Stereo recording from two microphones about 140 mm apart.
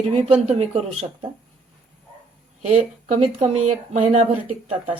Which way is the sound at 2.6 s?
50° right (ahead or behind).